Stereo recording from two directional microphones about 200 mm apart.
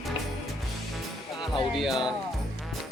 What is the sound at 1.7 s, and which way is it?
Speech, centre (ahead or behind).